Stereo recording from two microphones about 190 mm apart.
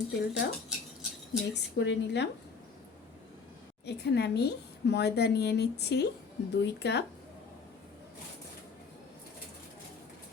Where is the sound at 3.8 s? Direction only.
60° left (ahead or behind).